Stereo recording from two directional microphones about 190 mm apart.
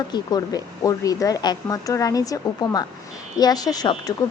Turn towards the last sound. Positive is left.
turn(degrees=20)  # may be behind; listen again after turning